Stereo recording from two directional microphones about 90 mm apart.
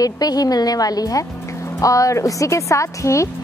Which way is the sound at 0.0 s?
45° left (ahead or behind).